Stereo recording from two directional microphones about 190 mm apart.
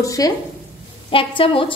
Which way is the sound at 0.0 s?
15° left (ahead or behind).